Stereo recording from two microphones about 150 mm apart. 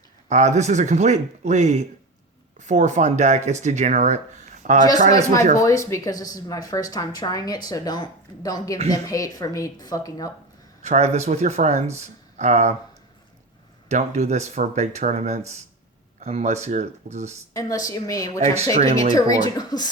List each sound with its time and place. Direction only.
0.3 s speech: 50° right (ahead or behind)
5.1 s speech: 20° left (ahead or behind)
10.8 s speech: 50° right (ahead or behind)
13.8 s speech: 50° right (ahead or behind)
17.5 s speech: 20° left (ahead or behind)
18.6 s speech: 45° right (ahead or behind)
19.1 s speech: 25° left (ahead or behind)